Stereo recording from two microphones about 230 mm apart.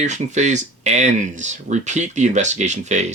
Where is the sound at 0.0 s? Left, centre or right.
Right.